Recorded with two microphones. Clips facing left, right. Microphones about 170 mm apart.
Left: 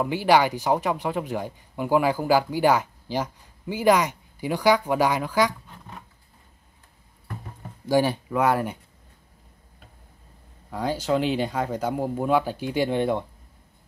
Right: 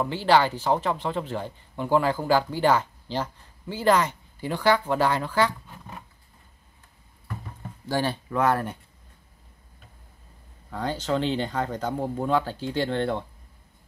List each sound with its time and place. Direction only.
0.0 s speech: 10° left (ahead or behind)
7.9 s speech: 10° left (ahead or behind)
10.7 s speech: 10° left (ahead or behind)